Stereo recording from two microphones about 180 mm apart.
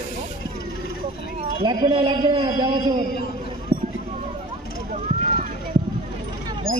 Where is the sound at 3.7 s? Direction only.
10° right (ahead or behind).